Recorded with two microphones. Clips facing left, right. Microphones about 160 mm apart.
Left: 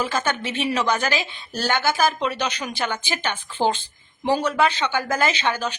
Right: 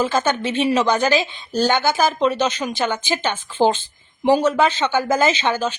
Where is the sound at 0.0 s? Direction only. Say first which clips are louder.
Right 5 dB; 25° right (ahead or behind).